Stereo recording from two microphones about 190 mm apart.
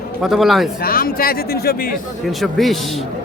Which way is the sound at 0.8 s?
50° left (ahead or behind).